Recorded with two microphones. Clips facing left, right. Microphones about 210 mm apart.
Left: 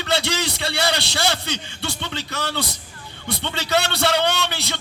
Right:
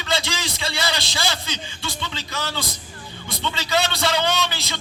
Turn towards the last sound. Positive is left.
turn(degrees=60)  # may be behind; listen again after turning